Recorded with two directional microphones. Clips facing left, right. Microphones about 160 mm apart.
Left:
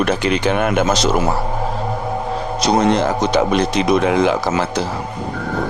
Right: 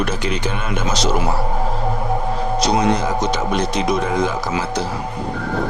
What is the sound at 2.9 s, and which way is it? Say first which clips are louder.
Speech: left 4 dB; 75° left (ahead or behind).